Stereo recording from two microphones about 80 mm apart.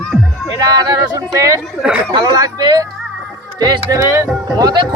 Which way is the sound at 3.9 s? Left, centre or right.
Right.